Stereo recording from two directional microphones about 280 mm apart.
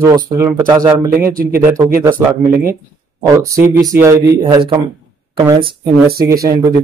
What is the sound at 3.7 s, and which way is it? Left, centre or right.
Speech, centre.